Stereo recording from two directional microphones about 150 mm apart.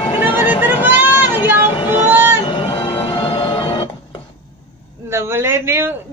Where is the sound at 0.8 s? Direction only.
10° right (ahead or behind).